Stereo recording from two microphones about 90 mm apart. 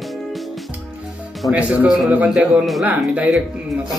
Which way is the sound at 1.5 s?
15° right (ahead or behind).